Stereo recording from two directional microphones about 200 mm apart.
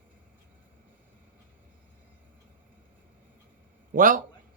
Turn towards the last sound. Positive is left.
turn(degrees=-40)  # may be behind; listen again after turning